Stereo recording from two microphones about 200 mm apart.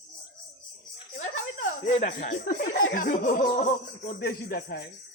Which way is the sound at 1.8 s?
35° left (ahead or behind).